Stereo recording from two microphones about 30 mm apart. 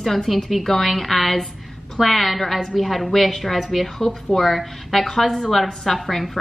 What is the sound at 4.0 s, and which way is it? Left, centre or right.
A woman's voice, centre.